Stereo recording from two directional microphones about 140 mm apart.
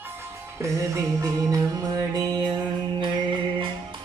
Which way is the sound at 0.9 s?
25° right (ahead or behind).